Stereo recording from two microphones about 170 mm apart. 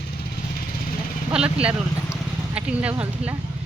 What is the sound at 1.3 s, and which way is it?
Speech, 5° right (ahead or behind).